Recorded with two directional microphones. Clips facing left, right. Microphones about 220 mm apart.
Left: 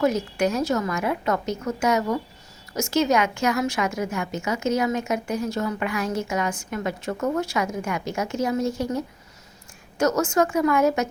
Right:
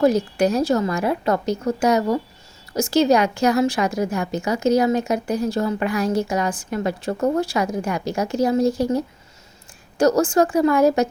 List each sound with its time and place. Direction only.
0.0 s a woman's voice: 35° right (ahead or behind)